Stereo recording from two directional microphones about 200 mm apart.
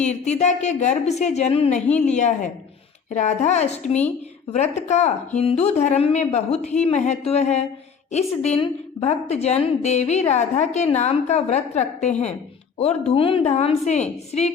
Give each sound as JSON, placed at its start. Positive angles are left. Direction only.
{"t": 0.0, "sound": "a woman's voice", "side_deg": 35}